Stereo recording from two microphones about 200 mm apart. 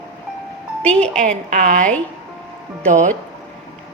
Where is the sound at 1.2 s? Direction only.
40° right (ahead or behind).